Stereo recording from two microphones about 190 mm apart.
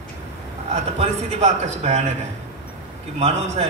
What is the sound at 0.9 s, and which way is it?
A man's voice, 40° right (ahead or behind).